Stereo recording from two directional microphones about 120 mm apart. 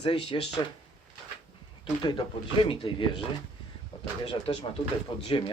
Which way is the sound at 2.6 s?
45° left (ahead or behind).